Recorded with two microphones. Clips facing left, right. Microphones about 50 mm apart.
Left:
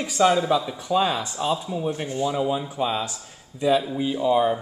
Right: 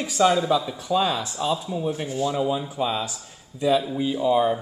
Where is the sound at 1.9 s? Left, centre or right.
Centre.